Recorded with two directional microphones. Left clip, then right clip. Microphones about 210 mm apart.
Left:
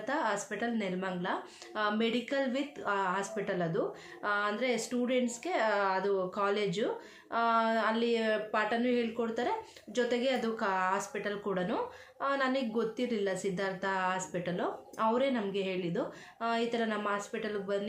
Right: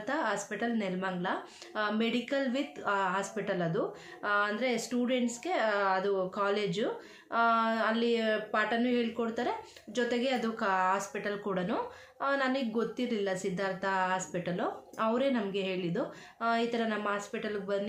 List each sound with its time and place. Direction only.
0.0 s a woman's voice: centre (ahead or behind)